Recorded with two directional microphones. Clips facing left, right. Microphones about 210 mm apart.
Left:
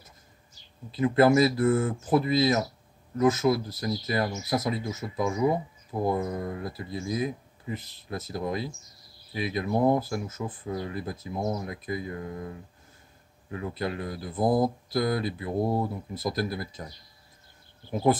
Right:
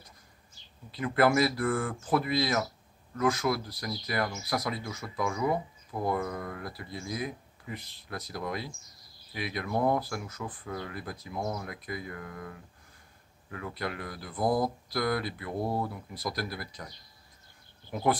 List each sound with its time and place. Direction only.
0.9 s speech: 25° left (ahead or behind)